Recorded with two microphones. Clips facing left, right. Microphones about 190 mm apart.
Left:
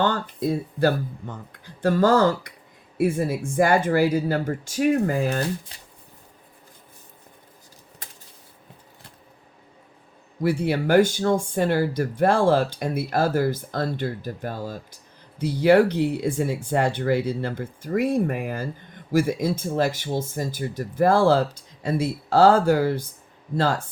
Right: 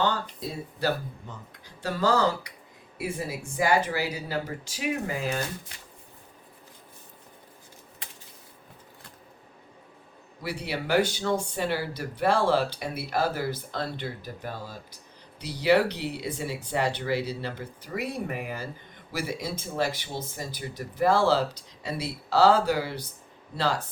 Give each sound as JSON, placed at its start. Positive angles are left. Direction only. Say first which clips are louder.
{"t": 0.0, "sound": "speech", "louder": "left 5 dB", "side_deg": 50}
{"t": 8.0, "sound": "a sound", "louder": "left 2 dB", "side_deg": 45}
{"t": 10.4, "sound": "speech", "louder": "left 10 dB", "side_deg": 50}